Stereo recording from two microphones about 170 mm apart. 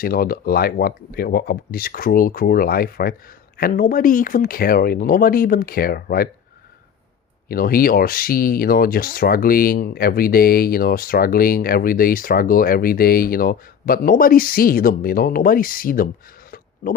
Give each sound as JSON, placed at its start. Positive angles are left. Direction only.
{"t": 0.0, "sound": "speech", "side_deg": 60}
{"t": 7.4, "sound": "speech", "side_deg": 60}